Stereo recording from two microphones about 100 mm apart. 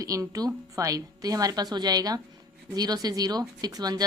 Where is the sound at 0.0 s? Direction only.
35° right (ahead or behind).